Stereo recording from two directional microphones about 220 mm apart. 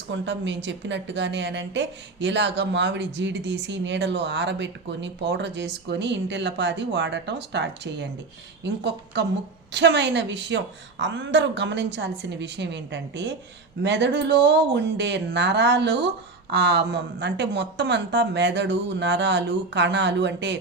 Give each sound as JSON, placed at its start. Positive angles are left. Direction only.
{"t": 0.1, "sound": "a woman's voice", "side_deg": -55}